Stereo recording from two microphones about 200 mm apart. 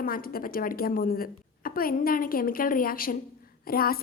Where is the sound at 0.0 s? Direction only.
45° left (ahead or behind).